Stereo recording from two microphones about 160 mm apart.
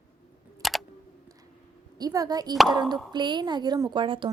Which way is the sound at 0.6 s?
Centre (ahead or behind).